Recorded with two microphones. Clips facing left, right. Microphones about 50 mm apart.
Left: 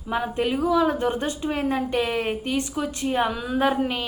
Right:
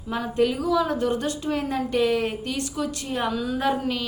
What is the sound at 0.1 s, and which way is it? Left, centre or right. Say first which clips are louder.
Speech: right 1 dB; centre.